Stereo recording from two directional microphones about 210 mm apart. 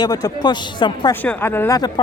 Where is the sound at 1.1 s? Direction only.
10° left (ahead or behind).